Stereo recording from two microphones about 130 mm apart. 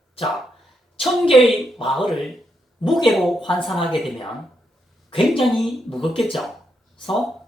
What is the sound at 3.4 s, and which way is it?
Speech, 40° left (ahead or behind).